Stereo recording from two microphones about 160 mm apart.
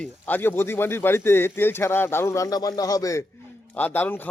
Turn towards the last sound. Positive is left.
turn(degrees=10)  # may be behind; listen again after turning